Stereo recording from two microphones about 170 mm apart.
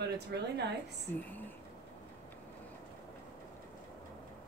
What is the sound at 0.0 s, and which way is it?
Speech, 85° right.